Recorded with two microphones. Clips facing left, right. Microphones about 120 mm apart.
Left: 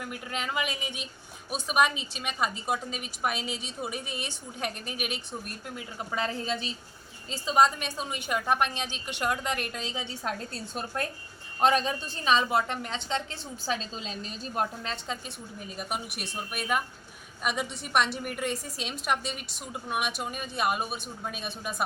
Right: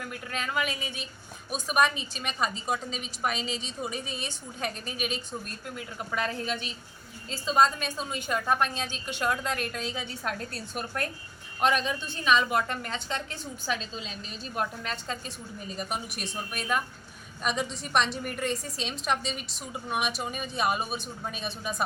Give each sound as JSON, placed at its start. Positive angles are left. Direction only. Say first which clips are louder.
{"t": 0.0, "sound": "a woman's voice", "louder": "even", "side_deg": 15}
{"t": 7.3, "sound": "a woman's voice", "louder": "even", "side_deg": 15}
{"t": 14.8, "sound": "a woman's voice", "louder": "even", "side_deg": 15}
{"t": 15.7, "sound": "a woman's voice", "louder": "right 1 dB", "side_deg": 5}